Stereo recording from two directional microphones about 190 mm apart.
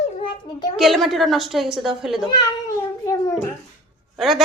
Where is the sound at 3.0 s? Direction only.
20° left (ahead or behind).